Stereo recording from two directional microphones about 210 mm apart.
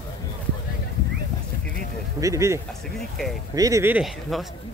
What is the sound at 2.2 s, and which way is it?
Speech, 15° right (ahead or behind).